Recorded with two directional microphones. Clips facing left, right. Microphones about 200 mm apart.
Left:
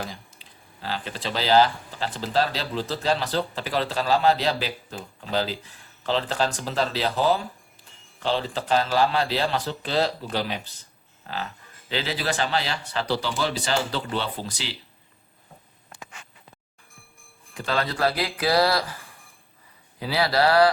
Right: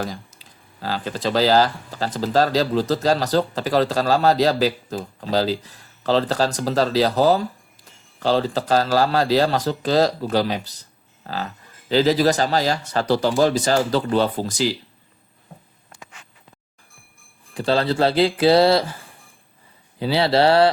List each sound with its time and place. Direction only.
0.0 s speech: 40° right (ahead or behind)
17.5 s speech: 30° right (ahead or behind)
20.0 s speech: 30° right (ahead or behind)